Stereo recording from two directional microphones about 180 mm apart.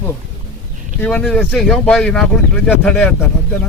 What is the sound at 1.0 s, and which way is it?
Speech, 5° left (ahead or behind).